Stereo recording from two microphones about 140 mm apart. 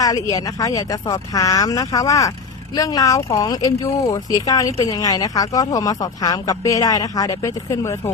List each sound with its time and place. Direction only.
0.0 s speech: 25° left (ahead or behind)